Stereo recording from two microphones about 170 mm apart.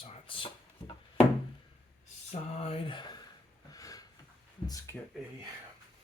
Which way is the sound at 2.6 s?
35° left (ahead or behind).